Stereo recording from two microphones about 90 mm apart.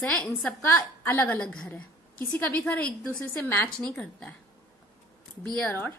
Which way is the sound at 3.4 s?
20° left (ahead or behind).